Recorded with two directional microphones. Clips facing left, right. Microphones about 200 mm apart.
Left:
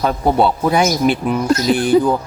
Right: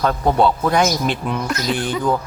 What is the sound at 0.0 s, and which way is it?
Speech, 10° left (ahead or behind).